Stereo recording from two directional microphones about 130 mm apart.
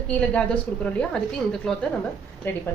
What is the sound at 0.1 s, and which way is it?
A woman's voice, 10° left (ahead or behind).